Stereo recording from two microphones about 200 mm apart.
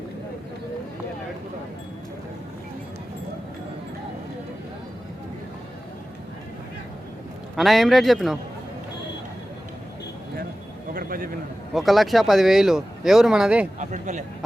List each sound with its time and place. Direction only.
7.5 s speech: centre (ahead or behind)
10.9 s a sound: 45° right (ahead or behind)
11.7 s speech: centre (ahead or behind)
13.7 s speech: 35° right (ahead or behind)